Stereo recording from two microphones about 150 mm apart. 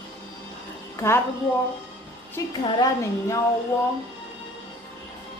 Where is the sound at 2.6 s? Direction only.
35° left (ahead or behind).